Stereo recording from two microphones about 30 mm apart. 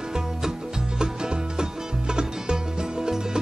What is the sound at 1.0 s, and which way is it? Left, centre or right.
Music, right.